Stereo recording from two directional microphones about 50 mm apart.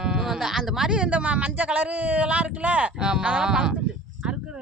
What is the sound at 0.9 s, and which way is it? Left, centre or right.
Speech, right.